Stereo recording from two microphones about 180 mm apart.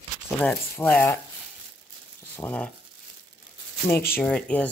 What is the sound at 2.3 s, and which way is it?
Speech, 10° left (ahead or behind).